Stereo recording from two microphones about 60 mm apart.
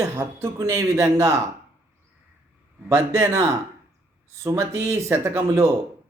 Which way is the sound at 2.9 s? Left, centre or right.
Right.